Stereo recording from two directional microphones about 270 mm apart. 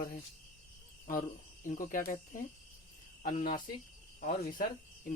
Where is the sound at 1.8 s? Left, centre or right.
Left.